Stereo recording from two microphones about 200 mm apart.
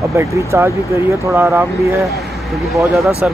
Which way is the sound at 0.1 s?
15° right (ahead or behind).